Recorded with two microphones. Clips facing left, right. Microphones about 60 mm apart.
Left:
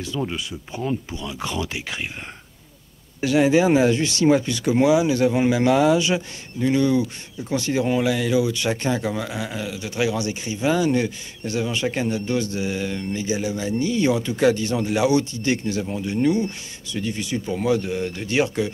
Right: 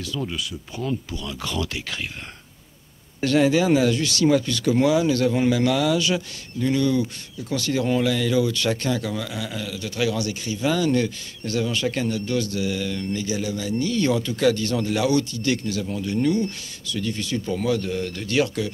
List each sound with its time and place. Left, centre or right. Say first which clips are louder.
0.0 s speech: left 2 dB; left
3.2 s speech: left 1 dB; centre